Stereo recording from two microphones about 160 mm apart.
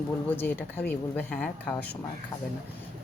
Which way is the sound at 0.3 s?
10° left (ahead or behind).